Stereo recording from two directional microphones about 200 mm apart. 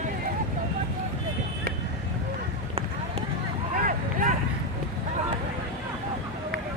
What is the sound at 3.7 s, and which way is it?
Vehicle, 40° right (ahead or behind).